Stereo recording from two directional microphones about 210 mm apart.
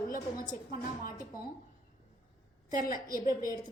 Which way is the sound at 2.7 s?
40° left (ahead or behind).